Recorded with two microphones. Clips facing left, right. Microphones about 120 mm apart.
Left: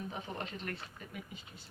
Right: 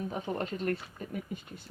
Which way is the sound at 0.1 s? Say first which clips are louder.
Right 7 dB; 45° right (ahead or behind).